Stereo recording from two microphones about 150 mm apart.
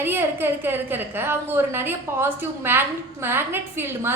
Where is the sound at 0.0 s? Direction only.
15° right (ahead or behind).